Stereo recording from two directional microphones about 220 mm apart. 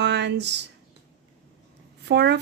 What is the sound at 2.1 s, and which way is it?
Speech, 50° right (ahead or behind).